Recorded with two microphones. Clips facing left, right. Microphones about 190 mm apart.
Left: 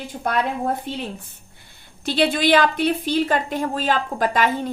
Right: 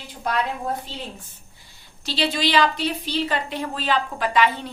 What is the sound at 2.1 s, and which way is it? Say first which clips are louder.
A woman's voice: left 6 dB; 50° left (ahead or behind).